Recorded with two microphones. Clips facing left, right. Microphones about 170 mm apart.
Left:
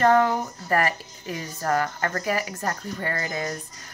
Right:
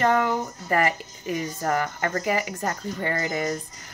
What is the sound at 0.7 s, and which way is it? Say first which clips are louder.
Speech: right 1 dB; 20° right (ahead or behind).